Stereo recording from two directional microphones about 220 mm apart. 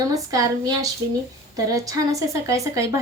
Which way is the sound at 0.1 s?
15° right (ahead or behind).